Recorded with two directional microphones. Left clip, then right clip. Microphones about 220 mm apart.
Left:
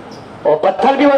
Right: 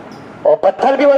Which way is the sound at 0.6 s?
35° right (ahead or behind).